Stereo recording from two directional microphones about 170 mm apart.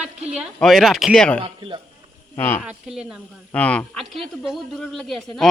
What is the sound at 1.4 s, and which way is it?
Speech, 30° right (ahead or behind).